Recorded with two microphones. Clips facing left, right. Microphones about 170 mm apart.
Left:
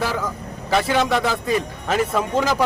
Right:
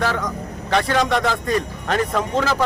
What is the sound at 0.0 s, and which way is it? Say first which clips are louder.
Speech: right 2 dB; 5° left (ahead or behind).